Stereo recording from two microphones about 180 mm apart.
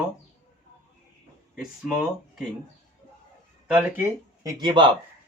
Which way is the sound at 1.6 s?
Centre (ahead or behind).